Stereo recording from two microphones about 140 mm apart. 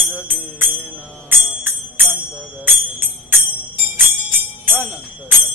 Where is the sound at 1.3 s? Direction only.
15° right (ahead or behind).